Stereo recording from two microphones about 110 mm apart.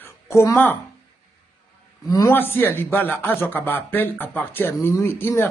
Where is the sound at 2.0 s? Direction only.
35° left (ahead or behind).